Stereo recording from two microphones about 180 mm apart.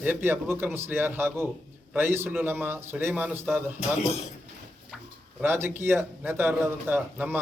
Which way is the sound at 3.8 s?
40° left (ahead or behind).